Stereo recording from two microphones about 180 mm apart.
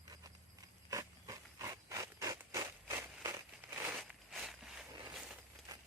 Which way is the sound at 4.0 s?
Centre (ahead or behind).